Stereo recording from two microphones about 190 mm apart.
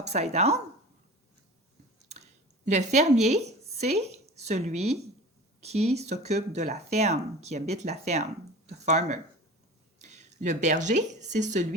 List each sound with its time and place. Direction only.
0.0 s speech: 35° right (ahead or behind)
2.0 s a sound: 35° right (ahead or behind)
5.5 s speech: 35° right (ahead or behind)